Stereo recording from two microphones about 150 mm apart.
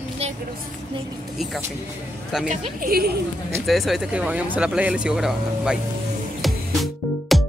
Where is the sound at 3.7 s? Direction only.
Centre (ahead or behind).